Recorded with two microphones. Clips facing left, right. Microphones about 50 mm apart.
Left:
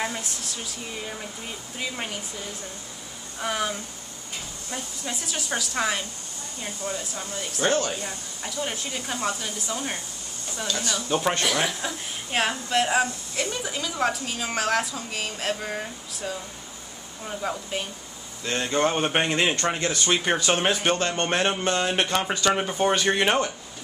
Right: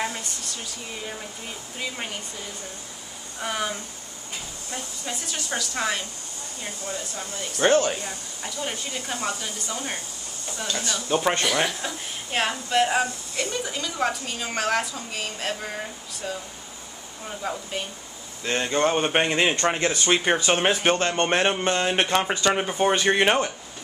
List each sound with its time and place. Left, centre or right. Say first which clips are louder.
0.0 s speech: even; centre
1.8 s speech: even; centre
3.3 s speech: left 1 dB; centre
4.7 s speech: even; centre
7.6 s speech: right 4 dB; right
8.0 s speech: even; centre
10.8 s speech: right 1 dB; centre
18.4 s speech: right 2 dB; centre
18.7 s speech: right 1 dB; centre
19.6 s speech: right 2 dB; centre